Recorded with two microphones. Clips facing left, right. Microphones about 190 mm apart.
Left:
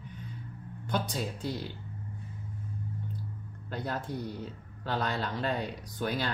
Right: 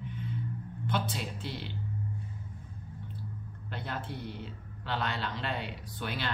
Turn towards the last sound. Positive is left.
turn(degrees=40)  # may be behind; listen again after turning